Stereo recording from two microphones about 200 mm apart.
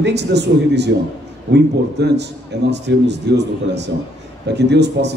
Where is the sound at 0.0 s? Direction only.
60° right (ahead or behind).